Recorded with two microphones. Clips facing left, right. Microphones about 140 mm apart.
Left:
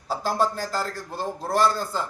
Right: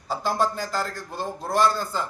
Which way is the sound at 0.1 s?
5° left (ahead or behind).